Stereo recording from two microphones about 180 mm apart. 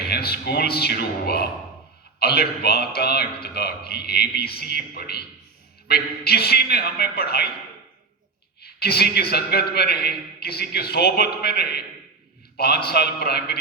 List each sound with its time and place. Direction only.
0.0 s a man's voice: 60° left (ahead or behind)
8.6 s a man's voice: 60° left (ahead or behind)